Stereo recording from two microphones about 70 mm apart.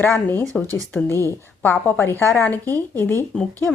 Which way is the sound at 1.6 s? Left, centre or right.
Left.